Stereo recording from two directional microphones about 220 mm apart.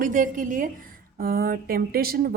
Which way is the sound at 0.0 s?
35° right (ahead or behind).